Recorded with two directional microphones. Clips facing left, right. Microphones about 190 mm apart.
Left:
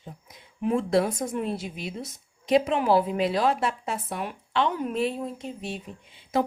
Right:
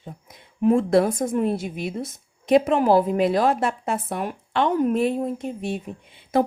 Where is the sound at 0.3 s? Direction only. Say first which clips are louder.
Right 7 dB; 50° right (ahead or behind).